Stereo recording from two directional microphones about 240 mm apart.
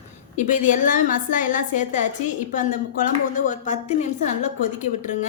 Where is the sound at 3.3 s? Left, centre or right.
Left.